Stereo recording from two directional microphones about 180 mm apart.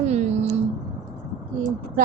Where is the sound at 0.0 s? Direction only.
40° right (ahead or behind).